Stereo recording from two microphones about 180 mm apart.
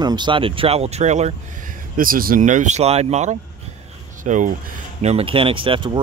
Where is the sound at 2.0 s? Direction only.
50° right (ahead or behind).